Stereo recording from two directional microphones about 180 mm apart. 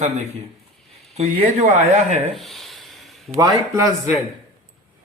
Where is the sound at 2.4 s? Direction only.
Centre (ahead or behind).